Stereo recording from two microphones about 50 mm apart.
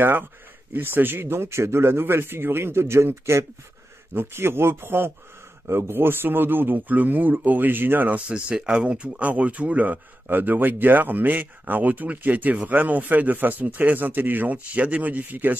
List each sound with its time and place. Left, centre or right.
0.7 s a man's voice: right
8.3 s speech: centre; by 15.5 s right